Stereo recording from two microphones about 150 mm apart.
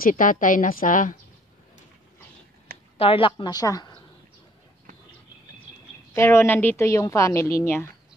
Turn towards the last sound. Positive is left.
turn(degrees=20)  # may be behind; listen again after turning